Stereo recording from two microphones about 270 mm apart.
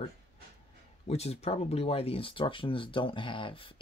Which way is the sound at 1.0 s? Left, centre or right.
Left.